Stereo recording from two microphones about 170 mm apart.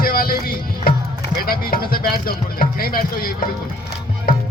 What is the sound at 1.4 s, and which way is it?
Speech, 60° left (ahead or behind).